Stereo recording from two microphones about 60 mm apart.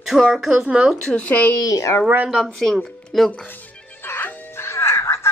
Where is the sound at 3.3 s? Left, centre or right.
Left.